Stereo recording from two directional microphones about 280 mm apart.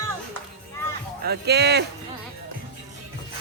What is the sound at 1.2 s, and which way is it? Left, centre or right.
Speech, right.